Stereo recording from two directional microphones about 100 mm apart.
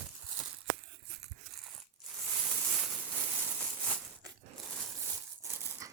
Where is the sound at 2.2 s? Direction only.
5° left (ahead or behind).